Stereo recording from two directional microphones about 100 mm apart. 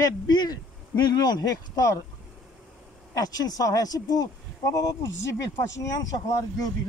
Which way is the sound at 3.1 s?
35° left (ahead or behind).